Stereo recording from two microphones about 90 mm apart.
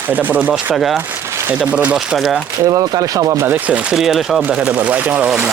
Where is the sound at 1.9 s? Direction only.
5° right (ahead or behind).